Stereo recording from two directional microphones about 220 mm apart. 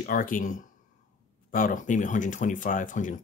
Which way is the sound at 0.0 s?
40° left (ahead or behind).